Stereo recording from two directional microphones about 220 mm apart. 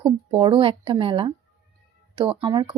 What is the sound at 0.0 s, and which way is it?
A woman's voice, 20° right (ahead or behind).